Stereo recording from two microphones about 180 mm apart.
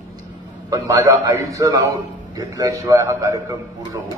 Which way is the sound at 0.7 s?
15° right (ahead or behind).